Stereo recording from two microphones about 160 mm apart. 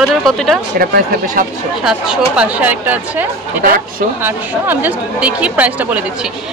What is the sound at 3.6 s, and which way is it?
Speech, 60° right (ahead or behind).